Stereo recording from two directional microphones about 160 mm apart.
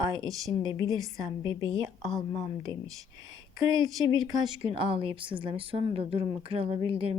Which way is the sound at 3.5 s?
20° right (ahead or behind).